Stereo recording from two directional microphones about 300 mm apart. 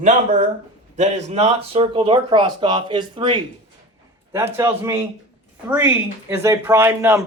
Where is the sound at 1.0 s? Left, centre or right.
Right.